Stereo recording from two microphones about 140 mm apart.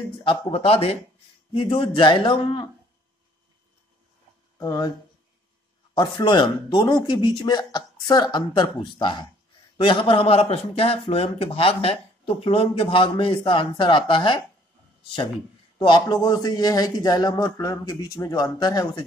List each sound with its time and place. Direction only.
0.2 s a man's voice: 40° left (ahead or behind)
4.6 s a man's voice: 25° left (ahead or behind)
5.9 s a man's voice: 35° left (ahead or behind)
15.8 s a man's voice: 30° left (ahead or behind)